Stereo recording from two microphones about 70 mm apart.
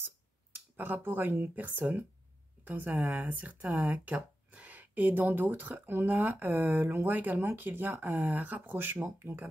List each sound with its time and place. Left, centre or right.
0.0 s speech: right